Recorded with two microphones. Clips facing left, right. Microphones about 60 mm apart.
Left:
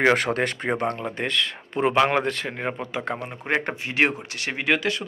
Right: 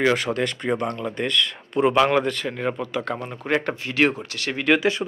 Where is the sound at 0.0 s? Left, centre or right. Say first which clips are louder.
Left 1 dB; left.